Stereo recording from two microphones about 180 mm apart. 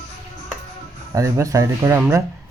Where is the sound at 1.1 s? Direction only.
15° right (ahead or behind).